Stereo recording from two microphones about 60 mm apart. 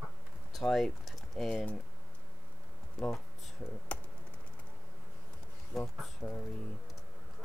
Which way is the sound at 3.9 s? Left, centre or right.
Left.